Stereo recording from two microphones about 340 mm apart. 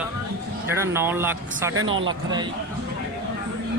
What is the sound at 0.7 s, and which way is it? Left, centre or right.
Speech, centre.